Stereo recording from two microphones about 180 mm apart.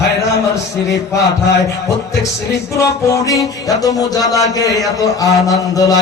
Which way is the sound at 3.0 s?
20° left (ahead or behind).